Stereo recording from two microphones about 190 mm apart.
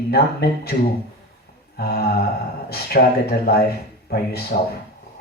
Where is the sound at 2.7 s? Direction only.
55° left (ahead or behind).